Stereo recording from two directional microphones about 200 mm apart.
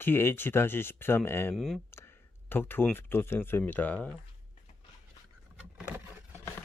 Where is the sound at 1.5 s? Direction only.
Centre (ahead or behind).